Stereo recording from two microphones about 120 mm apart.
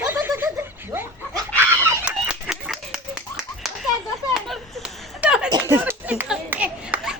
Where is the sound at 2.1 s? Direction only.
10° right (ahead or behind).